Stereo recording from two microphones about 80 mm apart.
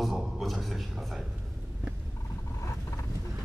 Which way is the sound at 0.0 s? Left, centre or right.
Centre.